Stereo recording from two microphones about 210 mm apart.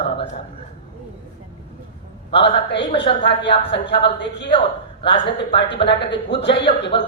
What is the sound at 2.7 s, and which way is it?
A woman's voice, 25° left (ahead or behind).